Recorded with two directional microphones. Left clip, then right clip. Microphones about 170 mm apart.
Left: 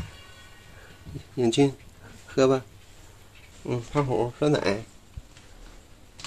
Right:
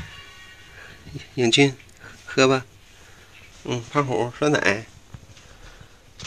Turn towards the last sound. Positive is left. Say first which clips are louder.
# right 4 dB
turn(degrees=-5)  # may be behind; listen again after turning